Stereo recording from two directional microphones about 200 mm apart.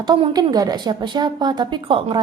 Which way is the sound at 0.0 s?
20° right (ahead or behind).